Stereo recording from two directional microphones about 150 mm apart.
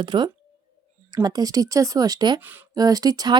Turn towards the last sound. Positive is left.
turn(degrees=-25)  # may be behind; listen again after turning